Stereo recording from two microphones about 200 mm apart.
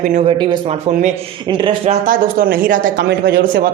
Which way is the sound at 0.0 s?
40° right (ahead or behind).